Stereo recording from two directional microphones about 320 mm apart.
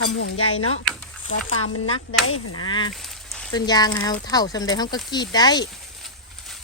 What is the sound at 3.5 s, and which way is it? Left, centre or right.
Speech, centre.